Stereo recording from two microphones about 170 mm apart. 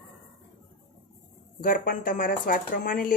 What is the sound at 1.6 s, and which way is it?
A woman's voice, 55° left (ahead or behind).